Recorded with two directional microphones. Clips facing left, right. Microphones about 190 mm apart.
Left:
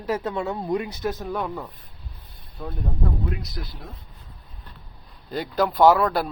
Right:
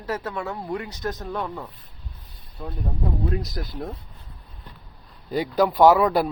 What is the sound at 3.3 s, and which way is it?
Speech, 45° right (ahead or behind).